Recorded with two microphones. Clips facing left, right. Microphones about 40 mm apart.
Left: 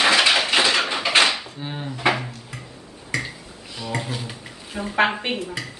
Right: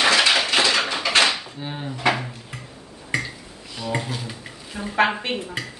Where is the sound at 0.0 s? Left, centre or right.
Centre.